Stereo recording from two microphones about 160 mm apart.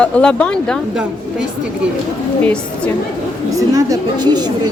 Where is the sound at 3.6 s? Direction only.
20° right (ahead or behind).